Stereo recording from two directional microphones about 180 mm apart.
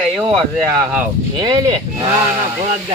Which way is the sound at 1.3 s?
25° right (ahead or behind).